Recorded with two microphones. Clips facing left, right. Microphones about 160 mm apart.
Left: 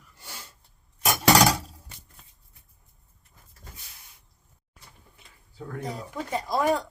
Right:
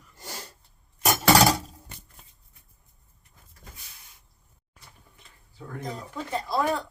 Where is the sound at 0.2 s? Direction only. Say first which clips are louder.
Right 5 dB; 40° right (ahead or behind).